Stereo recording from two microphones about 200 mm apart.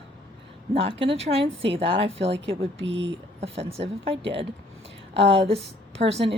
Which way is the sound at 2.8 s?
65° right (ahead or behind).